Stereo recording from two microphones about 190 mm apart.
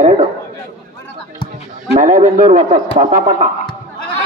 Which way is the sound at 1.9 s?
40° right (ahead or behind).